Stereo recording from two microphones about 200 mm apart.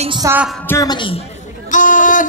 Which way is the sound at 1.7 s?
40° left (ahead or behind).